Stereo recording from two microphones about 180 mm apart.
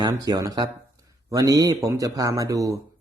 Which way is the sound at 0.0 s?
20° right (ahead or behind).